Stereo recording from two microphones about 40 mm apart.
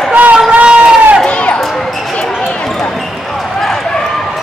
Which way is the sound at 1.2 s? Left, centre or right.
Left.